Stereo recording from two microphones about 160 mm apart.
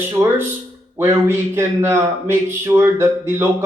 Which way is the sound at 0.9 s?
15° right (ahead or behind).